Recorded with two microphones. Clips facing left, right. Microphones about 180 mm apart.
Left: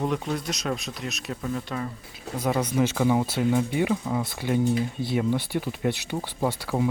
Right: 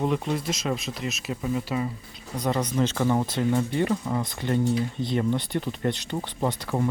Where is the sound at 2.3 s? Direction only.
5° left (ahead or behind).